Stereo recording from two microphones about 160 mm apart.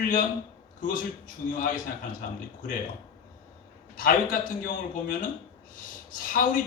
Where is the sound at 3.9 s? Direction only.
60° left (ahead or behind).